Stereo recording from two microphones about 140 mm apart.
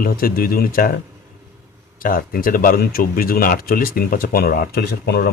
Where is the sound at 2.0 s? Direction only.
90° left.